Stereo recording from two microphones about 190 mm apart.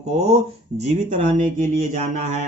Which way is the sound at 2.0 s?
35° right (ahead or behind).